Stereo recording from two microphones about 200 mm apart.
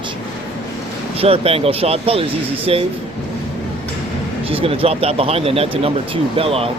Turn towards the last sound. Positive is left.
turn(degrees=-30)  # may be behind; listen again after turning